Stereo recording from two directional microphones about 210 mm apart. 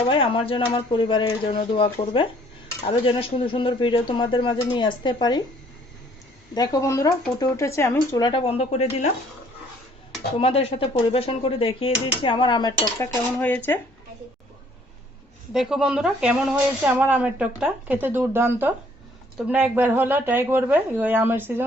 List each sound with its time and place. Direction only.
0.0 s speech: 25° left (ahead or behind)
6.5 s speech: 15° left (ahead or behind)
10.3 s speech: 30° left (ahead or behind)
13.4 s speech: 10° left (ahead or behind)
15.5 s speech: 5° right (ahead or behind)